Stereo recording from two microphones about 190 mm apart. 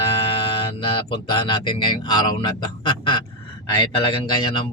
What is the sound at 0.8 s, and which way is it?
Speech, 25° left (ahead or behind).